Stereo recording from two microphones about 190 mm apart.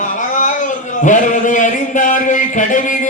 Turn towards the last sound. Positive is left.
turn(degrees=45)  # may be behind; listen again after turning